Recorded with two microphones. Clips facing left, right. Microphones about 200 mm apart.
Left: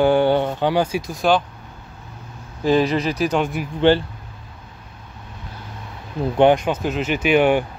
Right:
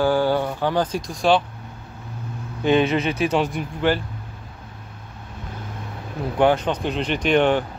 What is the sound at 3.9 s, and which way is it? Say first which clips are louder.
Speech: left 6 dB; 30° left (ahead or behind).